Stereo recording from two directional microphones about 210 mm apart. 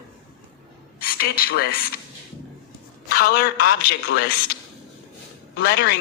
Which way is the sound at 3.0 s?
45° left (ahead or behind).